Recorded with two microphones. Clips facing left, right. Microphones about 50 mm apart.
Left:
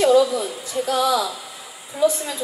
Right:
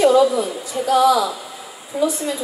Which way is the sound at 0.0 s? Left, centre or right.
Centre.